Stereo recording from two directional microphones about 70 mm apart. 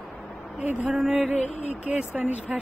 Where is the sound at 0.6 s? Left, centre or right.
Right.